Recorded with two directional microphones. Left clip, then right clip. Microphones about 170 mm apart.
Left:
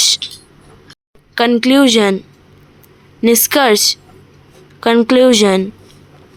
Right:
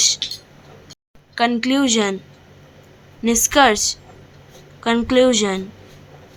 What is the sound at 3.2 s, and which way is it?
A woman's voice, 40° left (ahead or behind).